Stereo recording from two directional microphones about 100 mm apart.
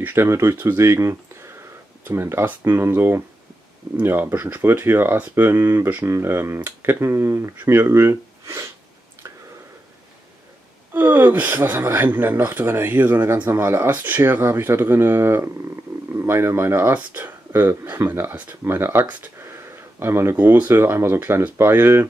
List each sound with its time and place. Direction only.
0.0 s speech: 25° right (ahead or behind)
10.9 s speech: 20° right (ahead or behind)